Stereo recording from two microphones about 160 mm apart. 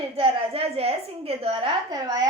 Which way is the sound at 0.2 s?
40° right (ahead or behind).